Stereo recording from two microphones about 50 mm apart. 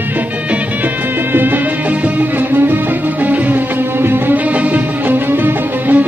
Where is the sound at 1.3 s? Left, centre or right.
Right.